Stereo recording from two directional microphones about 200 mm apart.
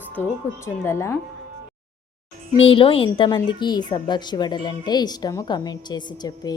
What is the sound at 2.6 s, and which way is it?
A woman's voice, 25° left (ahead or behind).